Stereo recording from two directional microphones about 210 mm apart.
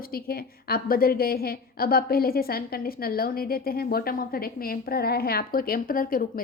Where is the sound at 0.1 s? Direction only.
45° left (ahead or behind).